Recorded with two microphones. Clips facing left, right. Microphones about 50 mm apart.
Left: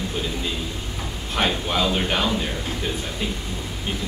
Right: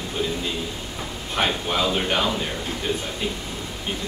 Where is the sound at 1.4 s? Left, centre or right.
Centre.